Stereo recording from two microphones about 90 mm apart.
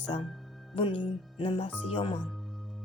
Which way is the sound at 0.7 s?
75° left (ahead or behind).